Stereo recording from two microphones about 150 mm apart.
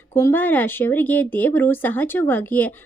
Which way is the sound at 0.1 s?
15° left (ahead or behind).